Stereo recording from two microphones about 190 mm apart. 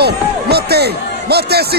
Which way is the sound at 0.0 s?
55° right (ahead or behind).